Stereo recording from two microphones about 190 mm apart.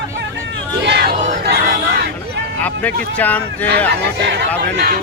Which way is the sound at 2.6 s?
10° left (ahead or behind).